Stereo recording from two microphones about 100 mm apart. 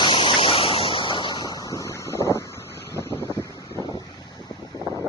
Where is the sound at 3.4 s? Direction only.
30° left (ahead or behind).